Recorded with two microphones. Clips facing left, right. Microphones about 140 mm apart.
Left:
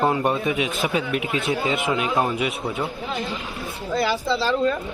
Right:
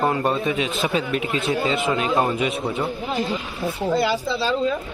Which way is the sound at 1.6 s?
15° left (ahead or behind).